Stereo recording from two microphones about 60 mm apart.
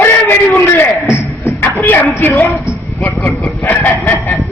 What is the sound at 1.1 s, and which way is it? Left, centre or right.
Music, left.